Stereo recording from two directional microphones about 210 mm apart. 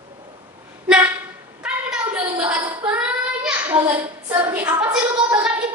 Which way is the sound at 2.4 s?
15° right (ahead or behind).